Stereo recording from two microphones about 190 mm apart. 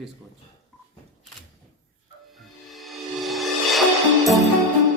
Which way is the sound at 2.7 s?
Centre (ahead or behind).